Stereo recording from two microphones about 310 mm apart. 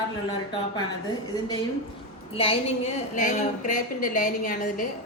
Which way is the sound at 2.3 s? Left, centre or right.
Centre.